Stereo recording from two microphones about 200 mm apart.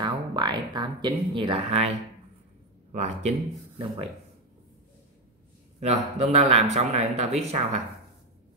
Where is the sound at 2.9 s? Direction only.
35° right (ahead or behind).